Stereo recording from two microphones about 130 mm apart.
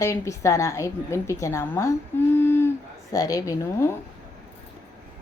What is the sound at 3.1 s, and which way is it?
Speech, 25° left (ahead or behind).